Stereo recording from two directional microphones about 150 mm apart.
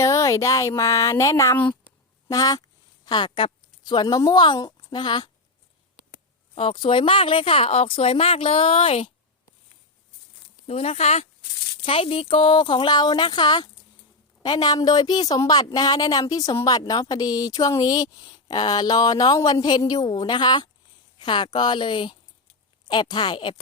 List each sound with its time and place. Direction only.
0.0 s speech: 20° left (ahead or behind)
6.5 s speech: 35° left (ahead or behind)
10.7 s speech: 45° left (ahead or behind)